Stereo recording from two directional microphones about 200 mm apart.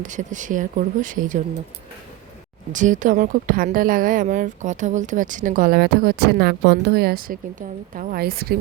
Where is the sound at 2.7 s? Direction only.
40° right (ahead or behind).